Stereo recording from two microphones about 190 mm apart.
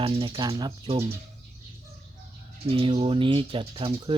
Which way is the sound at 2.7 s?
30° right (ahead or behind).